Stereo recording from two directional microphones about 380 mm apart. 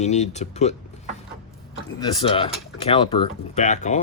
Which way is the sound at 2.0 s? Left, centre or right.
Centre.